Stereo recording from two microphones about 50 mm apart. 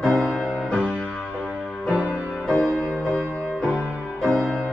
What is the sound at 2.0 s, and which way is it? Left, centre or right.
Music, centre.